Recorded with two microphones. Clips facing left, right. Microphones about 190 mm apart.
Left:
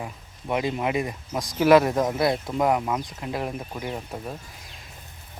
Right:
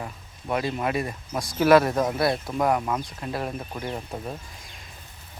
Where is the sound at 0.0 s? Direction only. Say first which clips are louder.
Left 1 dB; 15° left (ahead or behind).